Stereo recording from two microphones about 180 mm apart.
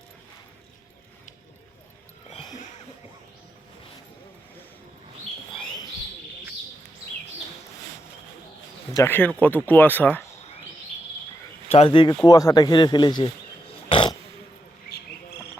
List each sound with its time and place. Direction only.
9.0 s speech: 10° left (ahead or behind)
11.7 s speech: 30° left (ahead or behind)
13.9 s a sound: 30° left (ahead or behind)